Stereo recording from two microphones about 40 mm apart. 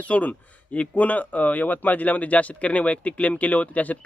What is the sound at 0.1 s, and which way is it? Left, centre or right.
Speech, left.